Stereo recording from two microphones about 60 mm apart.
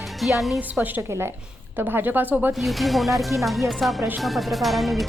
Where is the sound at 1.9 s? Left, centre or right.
Right.